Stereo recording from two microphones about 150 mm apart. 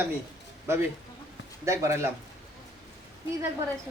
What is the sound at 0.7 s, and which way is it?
A man's voice, 15° right (ahead or behind).